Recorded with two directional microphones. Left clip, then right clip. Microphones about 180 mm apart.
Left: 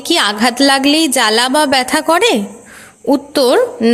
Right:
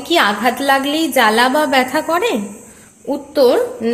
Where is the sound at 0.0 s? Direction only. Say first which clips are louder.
Left 1 dB; 35° left (ahead or behind).